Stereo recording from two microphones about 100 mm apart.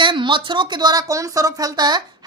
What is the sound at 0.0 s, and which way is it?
A woman's voice, 55° right (ahead or behind).